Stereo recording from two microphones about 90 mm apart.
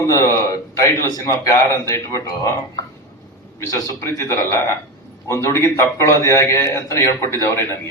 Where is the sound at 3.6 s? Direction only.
40° left (ahead or behind).